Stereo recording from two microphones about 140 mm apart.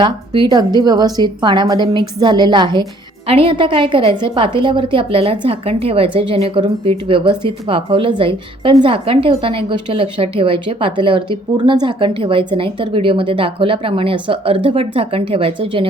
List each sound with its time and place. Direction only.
0.0 s a woman's voice: 30° right (ahead or behind)